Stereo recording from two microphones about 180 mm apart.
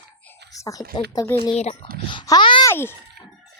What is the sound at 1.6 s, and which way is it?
Speech, 35° left (ahead or behind).